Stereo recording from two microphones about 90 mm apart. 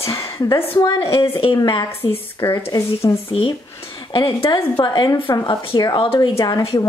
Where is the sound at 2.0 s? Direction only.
60° left (ahead or behind).